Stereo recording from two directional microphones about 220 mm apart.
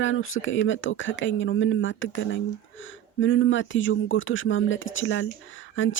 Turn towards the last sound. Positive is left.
turn(degrees=60)  # may be behind; listen again after turning